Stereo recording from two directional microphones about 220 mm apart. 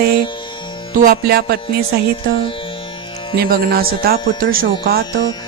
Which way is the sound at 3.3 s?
45° right (ahead or behind).